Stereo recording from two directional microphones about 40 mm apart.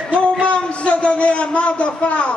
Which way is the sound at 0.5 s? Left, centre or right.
Left.